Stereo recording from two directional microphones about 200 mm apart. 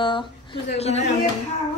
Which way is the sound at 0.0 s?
25° left (ahead or behind).